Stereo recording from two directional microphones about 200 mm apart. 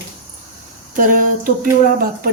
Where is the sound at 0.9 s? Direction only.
45° right (ahead or behind).